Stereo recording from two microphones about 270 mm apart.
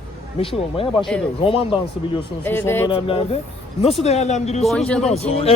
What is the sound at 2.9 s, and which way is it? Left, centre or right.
Speech, centre.